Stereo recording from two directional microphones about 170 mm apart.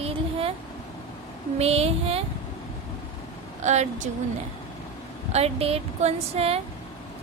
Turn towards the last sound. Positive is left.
turn(degrees=-35)  # may be behind; listen again after turning